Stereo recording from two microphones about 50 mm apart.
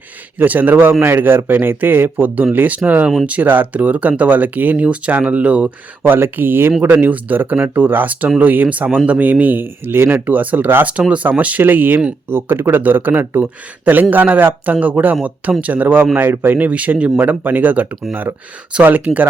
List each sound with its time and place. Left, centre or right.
0.3 s speech: right
6.0 s speech: right
6.8 s speech: right
7.7 s speech: right
10.2 s speech: right
12.3 s speech: right